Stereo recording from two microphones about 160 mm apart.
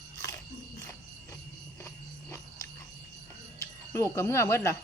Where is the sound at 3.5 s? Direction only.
20° left (ahead or behind).